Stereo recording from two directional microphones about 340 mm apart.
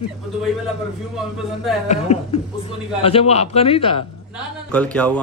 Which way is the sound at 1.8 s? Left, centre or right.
Centre.